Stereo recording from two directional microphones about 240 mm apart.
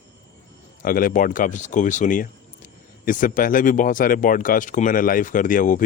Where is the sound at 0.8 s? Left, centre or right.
Left.